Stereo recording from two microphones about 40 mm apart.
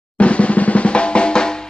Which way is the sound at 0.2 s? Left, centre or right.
Left.